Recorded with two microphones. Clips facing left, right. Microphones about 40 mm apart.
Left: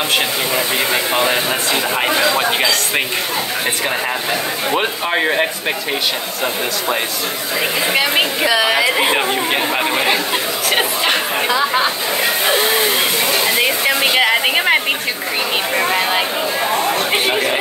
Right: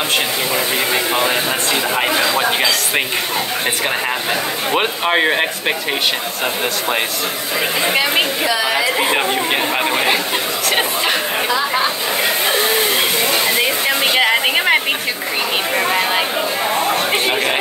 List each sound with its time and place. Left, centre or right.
0.9 s speech: centre
4.7 s speech: right
7.8 s speech: centre
8.8 s speech: centre
9.1 s speech: centre
13.6 s a sound: centre
16.7 s chatter: centre